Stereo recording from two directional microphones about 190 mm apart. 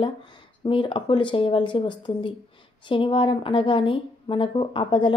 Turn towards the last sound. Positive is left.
turn(degrees=25)  # may be behind; listen again after turning